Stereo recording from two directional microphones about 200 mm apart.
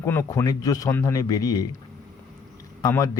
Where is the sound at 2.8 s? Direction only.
15° left (ahead or behind).